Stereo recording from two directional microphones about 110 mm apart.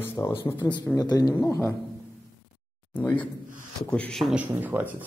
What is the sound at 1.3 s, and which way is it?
Speech, 25° left (ahead or behind).